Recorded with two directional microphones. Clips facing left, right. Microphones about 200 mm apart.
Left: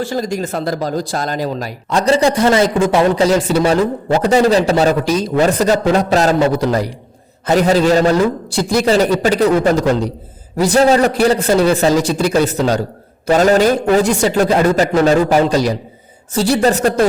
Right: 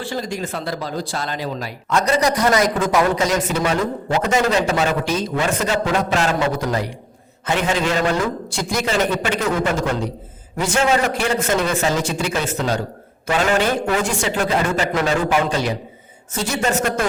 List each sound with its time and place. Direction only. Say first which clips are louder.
0.0 s speech: left 6 dB; 40° left (ahead or behind)